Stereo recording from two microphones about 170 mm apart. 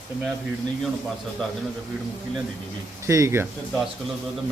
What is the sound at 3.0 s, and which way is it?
Speech, 15° right (ahead or behind).